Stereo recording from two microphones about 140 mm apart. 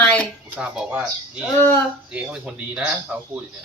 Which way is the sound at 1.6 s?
15° left (ahead or behind).